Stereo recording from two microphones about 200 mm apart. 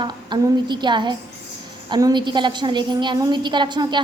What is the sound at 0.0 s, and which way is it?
A woman's voice, 20° right (ahead or behind).